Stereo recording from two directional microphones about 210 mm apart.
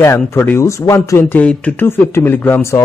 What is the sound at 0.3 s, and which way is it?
Speech, 10° left (ahead or behind).